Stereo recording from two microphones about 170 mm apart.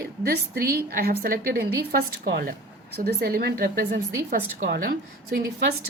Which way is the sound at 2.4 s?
60° right (ahead or behind).